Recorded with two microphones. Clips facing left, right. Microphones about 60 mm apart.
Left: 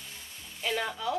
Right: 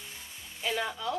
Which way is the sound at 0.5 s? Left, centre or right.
Centre.